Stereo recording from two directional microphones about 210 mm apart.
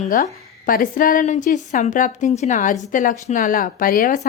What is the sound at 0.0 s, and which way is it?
A woman's voice, 35° left (ahead or behind).